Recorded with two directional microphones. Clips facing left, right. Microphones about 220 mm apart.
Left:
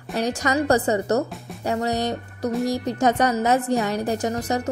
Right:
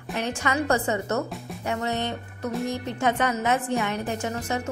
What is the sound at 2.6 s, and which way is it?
Speech, 40° left (ahead or behind).